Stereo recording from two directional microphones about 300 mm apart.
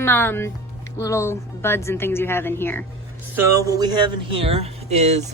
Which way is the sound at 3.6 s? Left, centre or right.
Centre.